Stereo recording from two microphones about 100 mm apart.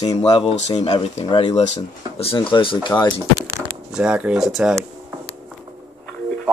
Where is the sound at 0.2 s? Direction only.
75° left (ahead or behind).